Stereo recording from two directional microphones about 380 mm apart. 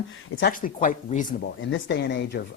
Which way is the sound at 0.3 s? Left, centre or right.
Left.